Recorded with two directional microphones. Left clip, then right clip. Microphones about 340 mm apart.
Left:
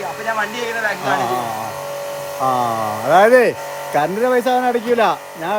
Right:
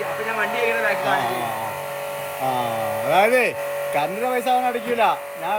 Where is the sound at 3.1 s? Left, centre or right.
Left.